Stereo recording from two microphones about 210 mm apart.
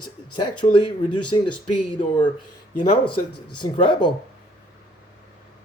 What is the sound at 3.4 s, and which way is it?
Speech, 20° left (ahead or behind).